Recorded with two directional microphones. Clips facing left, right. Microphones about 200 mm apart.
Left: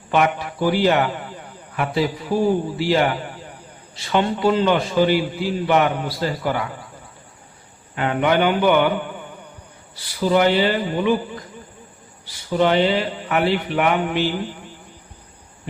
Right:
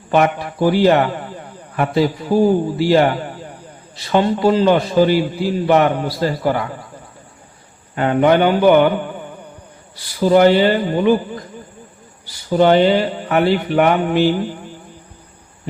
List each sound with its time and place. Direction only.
0.1 s a man's voice: 40° right (ahead or behind)
4.1 s a man's voice: 40° right (ahead or behind)
7.9 s a man's voice: 40° right (ahead or behind)
10.2 s speech: 40° right (ahead or behind)
12.2 s speech: 40° right (ahead or behind)